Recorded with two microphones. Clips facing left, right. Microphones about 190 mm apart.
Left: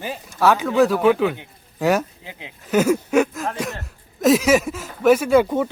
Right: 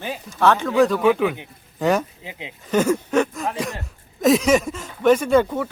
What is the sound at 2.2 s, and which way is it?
Speech, 20° right (ahead or behind).